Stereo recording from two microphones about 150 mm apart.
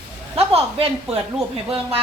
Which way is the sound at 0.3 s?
40° right (ahead or behind).